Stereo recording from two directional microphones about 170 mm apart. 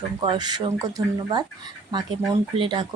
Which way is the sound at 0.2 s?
25° right (ahead or behind).